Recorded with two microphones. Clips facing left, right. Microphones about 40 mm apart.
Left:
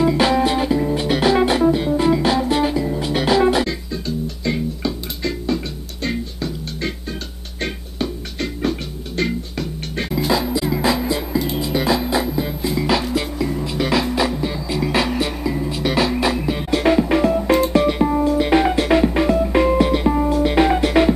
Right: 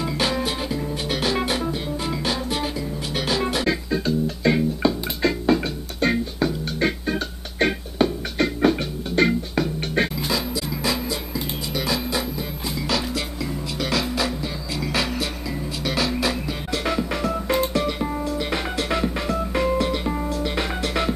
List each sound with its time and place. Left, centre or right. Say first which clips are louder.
0.0 s music: left 8 dB; centre
3.6 s music: right 3 dB; centre
10.1 s music: left 6 dB; centre